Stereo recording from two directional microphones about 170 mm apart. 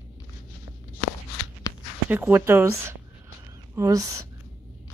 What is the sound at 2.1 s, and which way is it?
A woman's voice, 15° right (ahead or behind).